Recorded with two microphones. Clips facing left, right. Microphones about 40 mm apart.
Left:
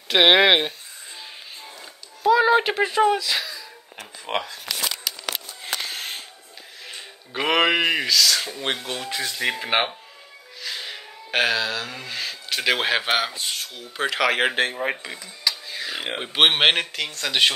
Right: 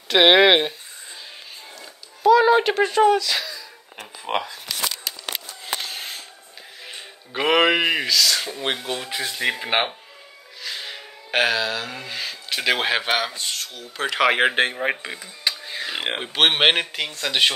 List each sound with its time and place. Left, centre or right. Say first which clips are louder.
0.1 s speech: right 1 dB; centre
2.2 s speech: right 2 dB; centre
6.9 s speech: even; centre
14.1 s speech: right 3 dB; centre
15.4 s a sound: right 1 dB; right
16.2 s speech: left 1 dB; centre